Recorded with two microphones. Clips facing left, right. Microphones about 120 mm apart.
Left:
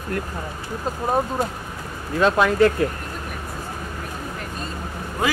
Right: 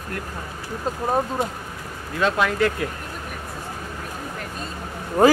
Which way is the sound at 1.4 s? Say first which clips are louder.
Left 1 dB; 25° right (ahead or behind).